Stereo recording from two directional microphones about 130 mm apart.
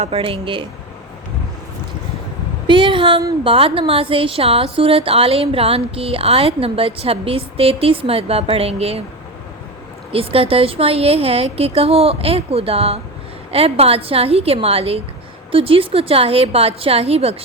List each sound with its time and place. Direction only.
0.0 s a woman's voice: 45° right (ahead or behind)
2.6 s a sound: 40° right (ahead or behind)
3.4 s a woman's voice: 45° right (ahead or behind)
10.1 s a woman's voice: 45° right (ahead or behind)